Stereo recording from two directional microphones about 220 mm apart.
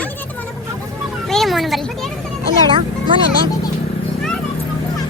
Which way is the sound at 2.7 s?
25° right (ahead or behind).